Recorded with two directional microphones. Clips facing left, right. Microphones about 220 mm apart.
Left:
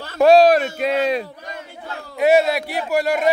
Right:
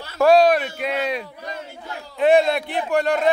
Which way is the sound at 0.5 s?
45° left (ahead or behind).